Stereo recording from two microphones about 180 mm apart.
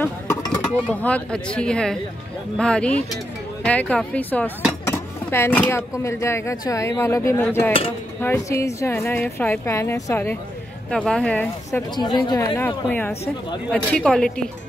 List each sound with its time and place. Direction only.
0.0 s a sound: 20° left (ahead or behind)
0.8 s speech: 5° left (ahead or behind)
10.9 s speech: 5° left (ahead or behind)
11.9 s a woman's voice: 25° left (ahead or behind)
12.5 s speech: 10° left (ahead or behind)
13.1 s speech: 35° left (ahead or behind)
13.7 s speech: 5° left (ahead or behind)